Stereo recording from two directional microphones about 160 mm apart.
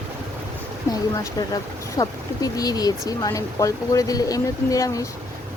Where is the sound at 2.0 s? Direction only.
25° left (ahead or behind).